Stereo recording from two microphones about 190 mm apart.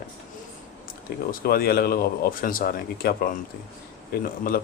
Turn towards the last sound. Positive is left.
turn(degrees=50)  # may be behind; listen again after turning